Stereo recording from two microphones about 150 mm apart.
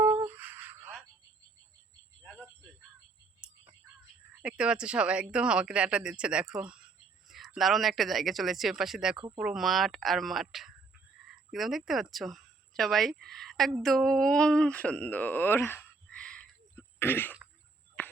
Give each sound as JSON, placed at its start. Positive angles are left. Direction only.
{"t": 0.0, "sound": "a sound", "side_deg": -20}
{"t": 2.2, "sound": "cricket", "side_deg": 5}
{"t": 3.4, "sound": "whispering", "side_deg": -5}
{"t": 4.4, "sound": "speech", "side_deg": -5}
{"t": 9.1, "sound": "speech", "side_deg": -35}
{"t": 9.4, "sound": "speech", "side_deg": 0}
{"t": 18.0, "sound": "a sound", "side_deg": 10}